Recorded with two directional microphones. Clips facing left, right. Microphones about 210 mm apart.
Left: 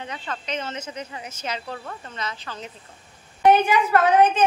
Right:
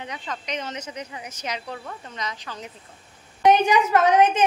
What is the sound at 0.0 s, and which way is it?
A woman's voice, 15° right (ahead or behind).